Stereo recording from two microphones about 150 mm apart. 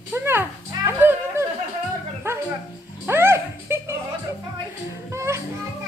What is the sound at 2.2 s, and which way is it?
Dog, 15° right (ahead or behind).